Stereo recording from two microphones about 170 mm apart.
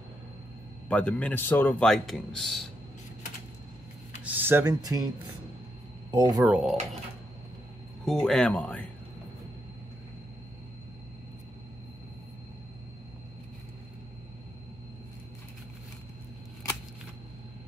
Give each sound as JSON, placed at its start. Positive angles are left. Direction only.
{"t": 0.8, "sound": "speech", "side_deg": 5}
{"t": 4.2, "sound": "speech", "side_deg": -10}
{"t": 6.1, "sound": "speech", "side_deg": -20}
{"t": 6.4, "sound": "speech", "side_deg": -5}
{"t": 8.0, "sound": "speech", "side_deg": 5}